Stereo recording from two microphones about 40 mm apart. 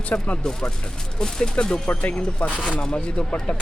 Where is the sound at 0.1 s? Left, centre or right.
Left.